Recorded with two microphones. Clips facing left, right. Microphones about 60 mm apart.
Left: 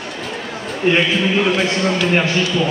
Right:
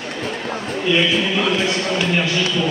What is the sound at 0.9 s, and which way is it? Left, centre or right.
Speech, left.